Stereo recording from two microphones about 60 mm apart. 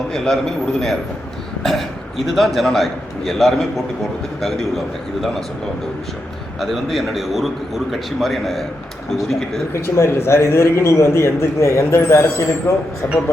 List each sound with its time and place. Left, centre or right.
0.1 s a man's voice: centre
6.6 s a man's voice: centre
9.7 s a man's voice: left